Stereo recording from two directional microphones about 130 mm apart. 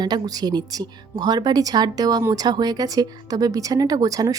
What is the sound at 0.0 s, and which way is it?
Speech, 30° right (ahead or behind).